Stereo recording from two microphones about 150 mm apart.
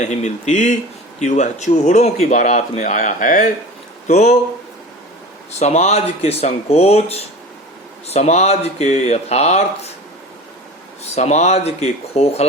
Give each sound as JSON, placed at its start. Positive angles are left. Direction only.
{"t": 0.0, "sound": "speech", "side_deg": 50}
{"t": 5.5, "sound": "speech", "side_deg": 45}
{"t": 11.1, "sound": "speech", "side_deg": 50}